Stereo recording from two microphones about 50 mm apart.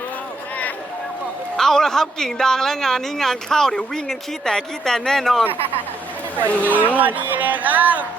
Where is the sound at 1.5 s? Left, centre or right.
Centre.